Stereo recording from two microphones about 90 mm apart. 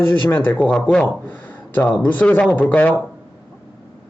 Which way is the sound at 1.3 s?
20° left (ahead or behind).